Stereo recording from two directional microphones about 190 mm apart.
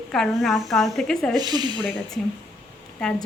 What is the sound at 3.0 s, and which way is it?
Speech, 5° left (ahead or behind).